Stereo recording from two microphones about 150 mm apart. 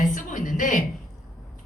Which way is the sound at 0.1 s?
60° left (ahead or behind).